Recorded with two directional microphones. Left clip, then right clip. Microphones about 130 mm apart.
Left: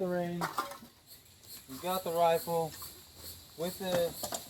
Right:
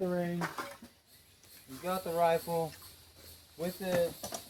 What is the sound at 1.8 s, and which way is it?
Speech, 15° left (ahead or behind).